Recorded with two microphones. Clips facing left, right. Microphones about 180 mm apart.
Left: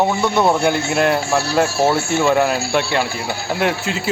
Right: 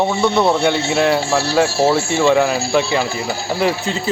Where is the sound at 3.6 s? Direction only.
5° left (ahead or behind).